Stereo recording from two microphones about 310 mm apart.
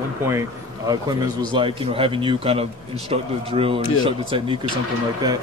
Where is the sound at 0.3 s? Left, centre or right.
Centre.